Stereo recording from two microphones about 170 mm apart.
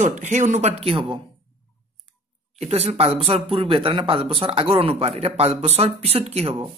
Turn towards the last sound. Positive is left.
turn(degrees=-35)  # may be behind; listen again after turning